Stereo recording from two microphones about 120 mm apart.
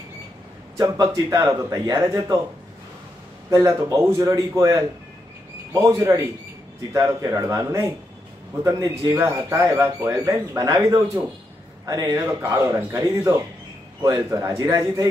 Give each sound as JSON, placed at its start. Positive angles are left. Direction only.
{"t": 0.7, "sound": "speech", "side_deg": -30}
{"t": 3.4, "sound": "speech", "side_deg": -25}